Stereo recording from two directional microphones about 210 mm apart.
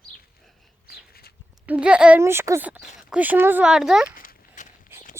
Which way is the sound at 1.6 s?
5° right (ahead or behind).